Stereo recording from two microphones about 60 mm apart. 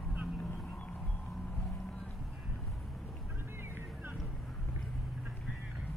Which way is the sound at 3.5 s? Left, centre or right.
Right.